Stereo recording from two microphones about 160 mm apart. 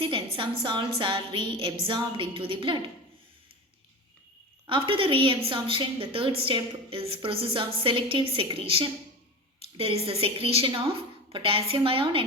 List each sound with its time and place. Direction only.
0.0 s a woman's voice: 35° right (ahead or behind)
4.6 s a woman's voice: 30° right (ahead or behind)